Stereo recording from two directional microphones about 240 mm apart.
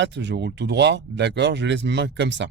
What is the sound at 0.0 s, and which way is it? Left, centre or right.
Speech, right.